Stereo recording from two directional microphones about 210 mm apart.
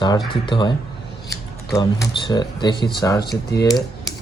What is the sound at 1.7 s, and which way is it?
Speech, 20° left (ahead or behind).